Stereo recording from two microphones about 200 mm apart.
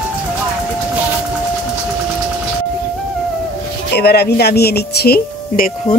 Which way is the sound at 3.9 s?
55° left (ahead or behind).